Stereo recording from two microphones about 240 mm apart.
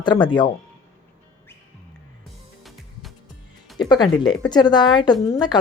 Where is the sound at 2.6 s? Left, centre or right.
Centre.